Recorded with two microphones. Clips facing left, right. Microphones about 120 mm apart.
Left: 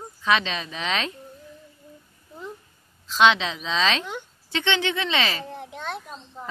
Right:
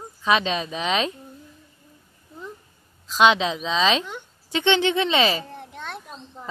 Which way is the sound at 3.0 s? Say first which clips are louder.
Right 1 dB; 15° right (ahead or behind).